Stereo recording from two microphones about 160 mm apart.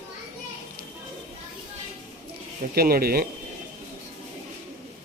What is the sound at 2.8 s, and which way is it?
Speech, 70° right (ahead or behind).